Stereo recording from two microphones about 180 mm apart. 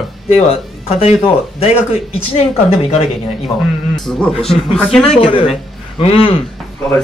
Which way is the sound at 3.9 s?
Centre (ahead or behind).